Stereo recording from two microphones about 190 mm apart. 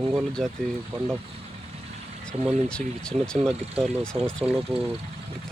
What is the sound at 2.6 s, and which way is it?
Speech, 5° left (ahead or behind).